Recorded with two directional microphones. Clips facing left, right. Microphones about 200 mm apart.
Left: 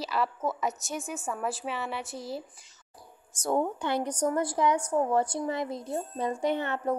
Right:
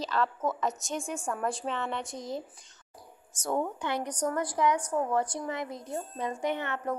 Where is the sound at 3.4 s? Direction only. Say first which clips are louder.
Left 3 dB; 30° left (ahead or behind).